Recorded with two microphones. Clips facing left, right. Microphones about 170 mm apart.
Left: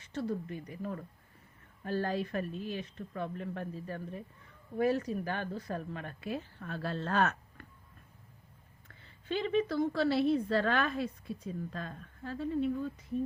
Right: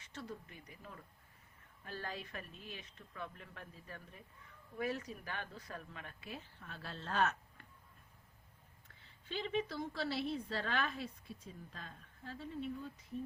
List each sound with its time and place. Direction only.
0.1 s a woman's voice: 35° left (ahead or behind)
1.8 s a woman's voice: 40° left (ahead or behind); by 7.7 s 65° left (ahead or behind)
8.9 s a woman's voice: 60° left (ahead or behind)